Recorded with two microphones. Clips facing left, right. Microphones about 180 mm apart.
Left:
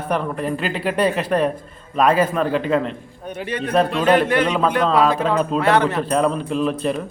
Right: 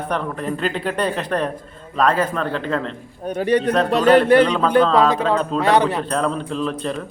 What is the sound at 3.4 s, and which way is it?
A man's voice, 40° right (ahead or behind).